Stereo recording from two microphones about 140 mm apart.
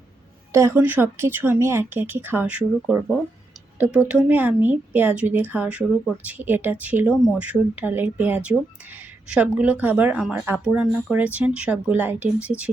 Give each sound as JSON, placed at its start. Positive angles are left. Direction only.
{"t": 0.5, "sound": "a woman's voice", "side_deg": -20}
{"t": 4.1, "sound": "a woman's voice", "side_deg": -15}